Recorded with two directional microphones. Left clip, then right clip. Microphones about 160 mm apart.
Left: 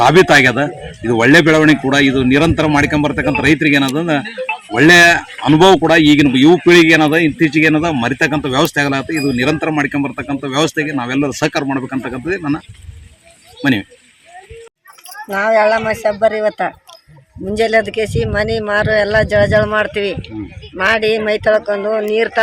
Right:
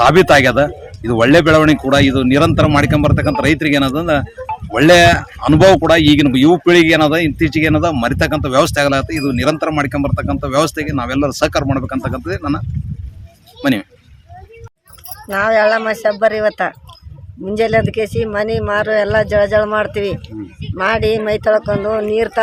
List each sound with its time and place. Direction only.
0.1 s a man's voice: 30° right (ahead or behind)
15.3 s speech: centre (ahead or behind)